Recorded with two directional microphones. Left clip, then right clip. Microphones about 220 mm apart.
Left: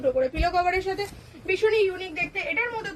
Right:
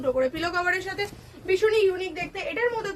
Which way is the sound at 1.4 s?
25° right (ahead or behind).